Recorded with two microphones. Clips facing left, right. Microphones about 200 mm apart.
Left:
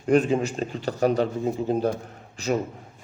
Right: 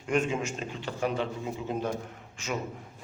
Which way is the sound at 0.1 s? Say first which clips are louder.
Left 8 dB; 35° left (ahead or behind).